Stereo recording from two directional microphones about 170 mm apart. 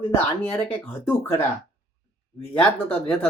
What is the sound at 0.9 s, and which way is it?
Speech, 10° left (ahead or behind).